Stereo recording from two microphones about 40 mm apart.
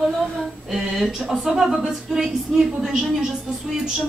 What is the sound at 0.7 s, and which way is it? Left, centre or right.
A woman's voice, centre.